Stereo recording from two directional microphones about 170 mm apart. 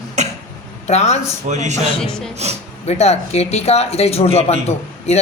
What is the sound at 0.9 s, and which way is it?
Speech, 40° left (ahead or behind).